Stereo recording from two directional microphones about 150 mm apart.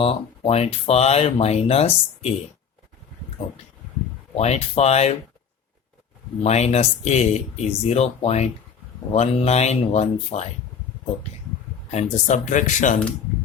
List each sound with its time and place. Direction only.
0.0 s speech: 40° left (ahead or behind)
4.4 s speech: 45° left (ahead or behind)
6.4 s speech: 45° left (ahead or behind)
11.9 s speech: 50° left (ahead or behind)